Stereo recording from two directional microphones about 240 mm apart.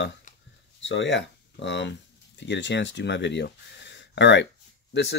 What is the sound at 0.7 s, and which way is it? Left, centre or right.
Speech, left.